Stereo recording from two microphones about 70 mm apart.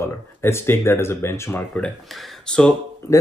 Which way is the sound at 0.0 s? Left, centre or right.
Left.